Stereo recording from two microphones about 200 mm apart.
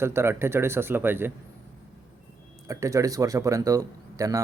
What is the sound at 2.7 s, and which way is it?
Speech, 15° right (ahead or behind).